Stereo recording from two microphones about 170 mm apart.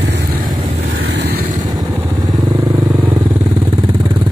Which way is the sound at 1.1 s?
80° right.